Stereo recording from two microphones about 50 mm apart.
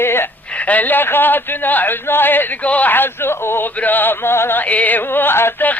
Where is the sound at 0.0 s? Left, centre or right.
Left.